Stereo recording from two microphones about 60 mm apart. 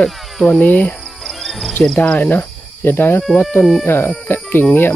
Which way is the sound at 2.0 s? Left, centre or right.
Left.